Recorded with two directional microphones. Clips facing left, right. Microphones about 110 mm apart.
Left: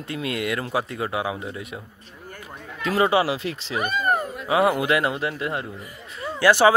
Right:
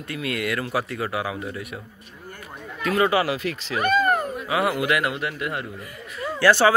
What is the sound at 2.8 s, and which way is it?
A man's voice, 25° left (ahead or behind).